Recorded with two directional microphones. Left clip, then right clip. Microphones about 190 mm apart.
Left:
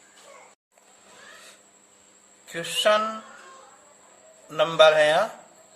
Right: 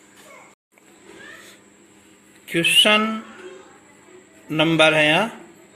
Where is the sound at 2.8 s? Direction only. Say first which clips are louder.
Right 2 dB; 10° right (ahead or behind).